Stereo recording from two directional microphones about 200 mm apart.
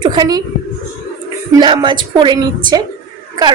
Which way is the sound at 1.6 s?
20° right (ahead or behind).